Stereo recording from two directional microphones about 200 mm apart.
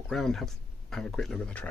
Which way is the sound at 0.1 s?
Centre (ahead or behind).